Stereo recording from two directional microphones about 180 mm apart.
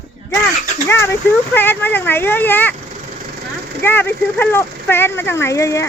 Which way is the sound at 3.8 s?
10° left (ahead or behind).